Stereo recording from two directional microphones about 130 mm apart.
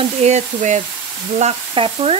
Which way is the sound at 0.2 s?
60° right (ahead or behind).